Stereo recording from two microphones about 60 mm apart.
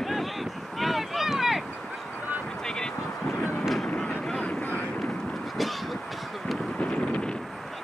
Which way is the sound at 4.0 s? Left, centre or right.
Centre.